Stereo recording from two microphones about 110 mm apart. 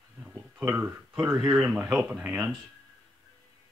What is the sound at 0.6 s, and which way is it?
Speech, 15° right (ahead or behind).